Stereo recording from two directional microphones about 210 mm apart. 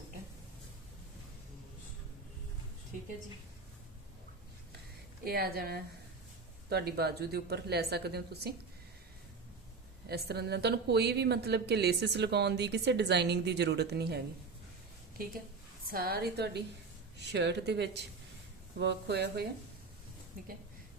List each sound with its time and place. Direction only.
5.2 s a woman's voice: 45° right (ahead or behind)
10.1 s a woman's voice: 50° right (ahead or behind)
15.9 s a woman's voice: 45° right (ahead or behind)